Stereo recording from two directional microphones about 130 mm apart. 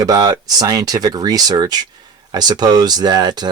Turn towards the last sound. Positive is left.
turn(degrees=-30)  # may be behind; listen again after turning